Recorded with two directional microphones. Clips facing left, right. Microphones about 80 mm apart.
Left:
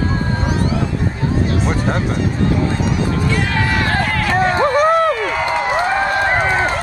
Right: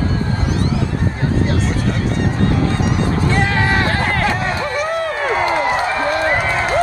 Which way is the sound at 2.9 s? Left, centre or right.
Right.